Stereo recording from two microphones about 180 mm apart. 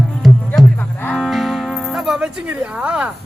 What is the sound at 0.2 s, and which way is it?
Music, centre (ahead or behind).